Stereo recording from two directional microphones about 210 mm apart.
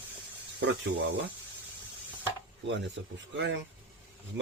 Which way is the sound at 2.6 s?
60° right (ahead or behind).